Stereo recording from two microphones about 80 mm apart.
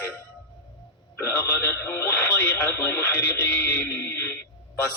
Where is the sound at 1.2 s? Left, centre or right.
Left.